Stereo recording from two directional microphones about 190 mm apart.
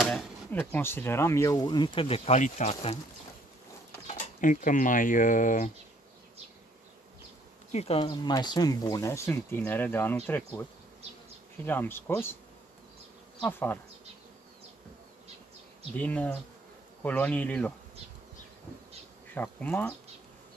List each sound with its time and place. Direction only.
0.0 s speech: 10° left (ahead or behind); by 3.0 s 35° left (ahead or behind)
4.1 s speech: 40° left (ahead or behind)
7.7 s speech: 30° left (ahead or behind); by 10.6 s 10° left (ahead or behind)
11.6 s speech: 10° left (ahead or behind)
13.4 s speech: 10° left (ahead or behind)
16.0 s speech: 10° left (ahead or behind)
19.3 s speech: 10° left (ahead or behind)